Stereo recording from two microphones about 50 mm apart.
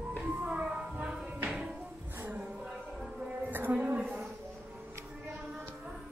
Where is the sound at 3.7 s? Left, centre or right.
Right.